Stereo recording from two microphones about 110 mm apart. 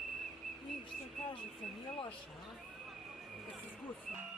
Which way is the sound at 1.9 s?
55° left (ahead or behind).